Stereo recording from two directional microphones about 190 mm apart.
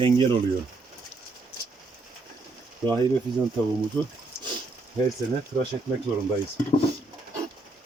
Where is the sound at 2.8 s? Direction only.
25° right (ahead or behind).